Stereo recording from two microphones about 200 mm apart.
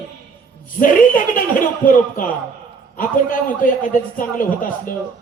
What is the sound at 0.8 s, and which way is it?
A man's voice, 45° left (ahead or behind).